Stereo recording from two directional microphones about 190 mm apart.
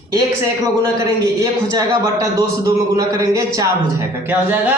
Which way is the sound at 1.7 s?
15° right (ahead or behind).